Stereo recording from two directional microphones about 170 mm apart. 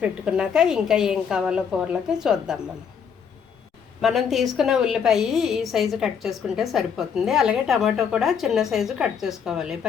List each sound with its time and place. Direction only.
0.0 s a woman's voice: 5° right (ahead or behind)
4.0 s a woman's voice: centre (ahead or behind)